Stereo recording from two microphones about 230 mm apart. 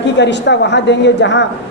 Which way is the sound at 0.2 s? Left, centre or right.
Left.